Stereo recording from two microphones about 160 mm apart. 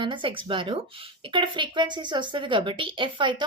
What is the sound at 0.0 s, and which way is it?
A woman's voice, 30° right (ahead or behind).